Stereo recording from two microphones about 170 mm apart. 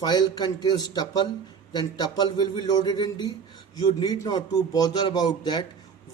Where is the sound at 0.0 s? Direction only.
25° left (ahead or behind).